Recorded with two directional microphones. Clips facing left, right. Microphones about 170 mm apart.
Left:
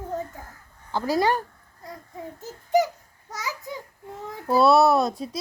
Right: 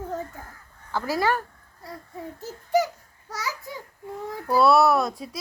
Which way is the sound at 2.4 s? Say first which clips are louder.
Left 1 dB; 20° left (ahead or behind).